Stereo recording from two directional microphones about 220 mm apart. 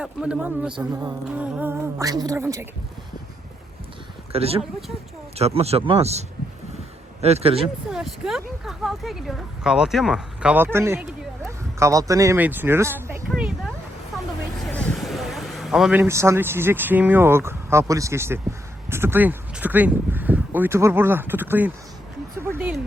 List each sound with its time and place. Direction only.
0.0 s speech: 5° right (ahead or behind)
4.3 s speech: 25° right (ahead or behind)
7.9 s speech: centre (ahead or behind)
11.4 s a sound: 15° right (ahead or behind)
14.7 s speech: 5° left (ahead or behind)
22.4 s a sound: 10° right (ahead or behind)